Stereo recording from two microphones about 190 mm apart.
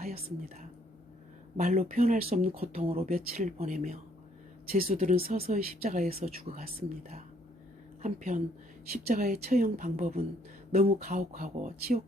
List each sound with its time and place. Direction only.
0.0 s speech: 35° right (ahead or behind)
6.2 s speech: 40° right (ahead or behind)
8.0 s speech: 40° right (ahead or behind)